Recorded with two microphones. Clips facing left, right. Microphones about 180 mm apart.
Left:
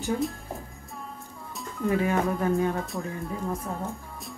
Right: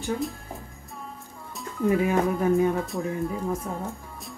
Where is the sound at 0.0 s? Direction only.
Centre (ahead or behind).